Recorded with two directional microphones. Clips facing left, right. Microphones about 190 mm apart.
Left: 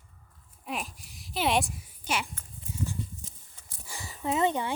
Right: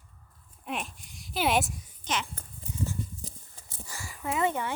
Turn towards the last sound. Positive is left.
turn(degrees=20)  # may be behind; listen again after turning